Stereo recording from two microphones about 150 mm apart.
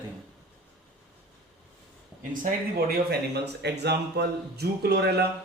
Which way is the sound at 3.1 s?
90° right.